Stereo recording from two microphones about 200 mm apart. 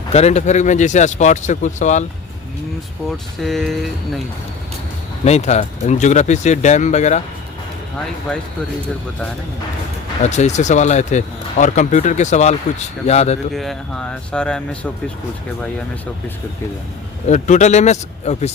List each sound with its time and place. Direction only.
0.1 s speech: 35° left (ahead or behind)
3.4 s speech: centre (ahead or behind)
5.2 s speech: 35° left (ahead or behind)
10.2 s speech: 35° left (ahead or behind)
13.5 s speech: centre (ahead or behind)
17.2 s speech: 35° left (ahead or behind)